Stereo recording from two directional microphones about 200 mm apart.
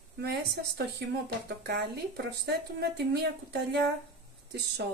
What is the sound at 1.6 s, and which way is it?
Speech, 60° right (ahead or behind).